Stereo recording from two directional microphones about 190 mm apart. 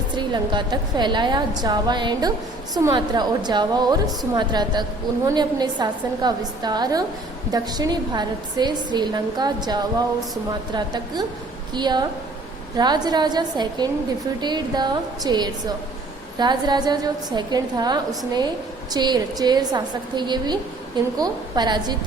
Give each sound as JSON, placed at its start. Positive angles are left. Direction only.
{"t": 0.2, "sound": "a woman's voice", "side_deg": -25}